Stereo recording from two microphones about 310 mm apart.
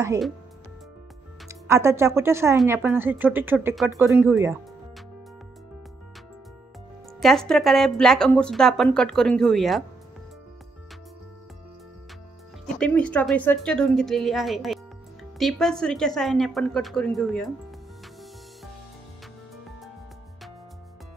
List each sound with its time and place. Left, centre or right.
0.0 s speech: centre
1.5 s speech: centre
7.2 s speech: centre
12.6 s speech: centre